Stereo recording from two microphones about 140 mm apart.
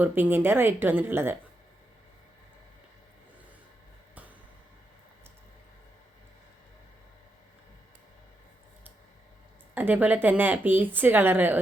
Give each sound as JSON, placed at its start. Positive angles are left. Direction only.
{"t": 0.0, "sound": "a woman's voice", "side_deg": -15}
{"t": 9.7, "sound": "a woman's voice", "side_deg": -10}